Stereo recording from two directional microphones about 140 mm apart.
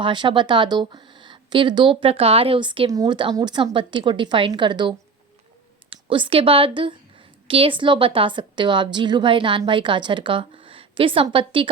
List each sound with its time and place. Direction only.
0.0 s a woman's voice: 35° right (ahead or behind)